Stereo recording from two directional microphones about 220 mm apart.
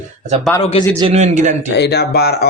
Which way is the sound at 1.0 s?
30° right (ahead or behind).